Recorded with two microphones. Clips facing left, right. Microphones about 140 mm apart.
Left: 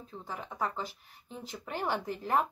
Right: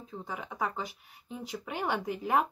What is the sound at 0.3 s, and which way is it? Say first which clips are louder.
Speech: even; 10° right (ahead or behind).